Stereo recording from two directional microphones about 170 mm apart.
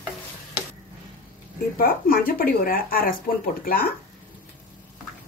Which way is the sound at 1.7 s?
55° left (ahead or behind).